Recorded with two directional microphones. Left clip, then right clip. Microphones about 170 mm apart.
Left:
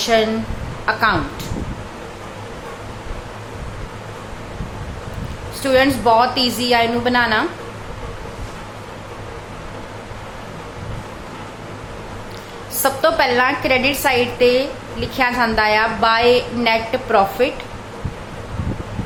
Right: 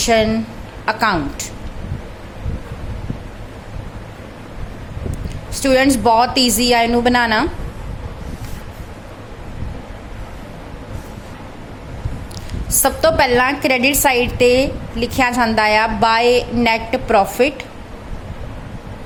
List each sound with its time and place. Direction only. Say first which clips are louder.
0.0 s a woman's voice: right 1 dB; 40° right (ahead or behind)
5.5 s a woman's voice: right 1 dB; 45° right (ahead or behind)
12.8 s a woman's voice: right 1 dB; 45° right (ahead or behind)